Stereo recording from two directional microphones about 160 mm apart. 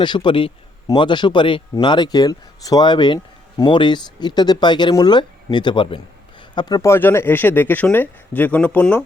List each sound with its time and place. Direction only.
0.0 s speech: 30° left (ahead or behind); by 9.0 s 5° left (ahead or behind)